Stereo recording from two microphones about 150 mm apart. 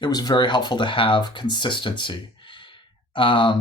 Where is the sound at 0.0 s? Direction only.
25° left (ahead or behind).